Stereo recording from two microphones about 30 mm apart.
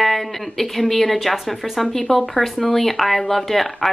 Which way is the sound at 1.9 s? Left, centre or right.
Centre.